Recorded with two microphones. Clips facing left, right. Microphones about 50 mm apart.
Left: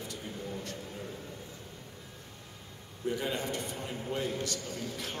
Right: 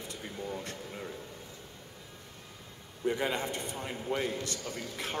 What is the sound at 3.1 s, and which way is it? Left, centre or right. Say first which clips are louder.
A man's voice: right 2 dB; right.